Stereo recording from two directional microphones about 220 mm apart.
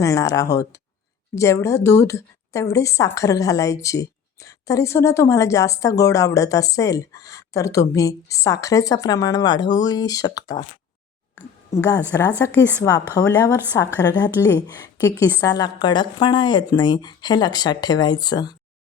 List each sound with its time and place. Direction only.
0.0 s a woman's voice: 15° left (ahead or behind)
11.3 s a sound: 15° left (ahead or behind)
12.4 s a woman's voice: 10° left (ahead or behind)